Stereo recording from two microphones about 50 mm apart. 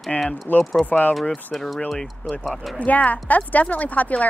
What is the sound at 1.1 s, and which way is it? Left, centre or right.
Speech, centre.